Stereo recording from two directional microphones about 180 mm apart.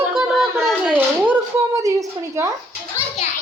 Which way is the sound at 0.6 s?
Centre (ahead or behind).